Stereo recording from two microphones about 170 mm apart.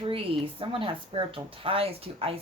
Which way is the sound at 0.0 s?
30° right (ahead or behind).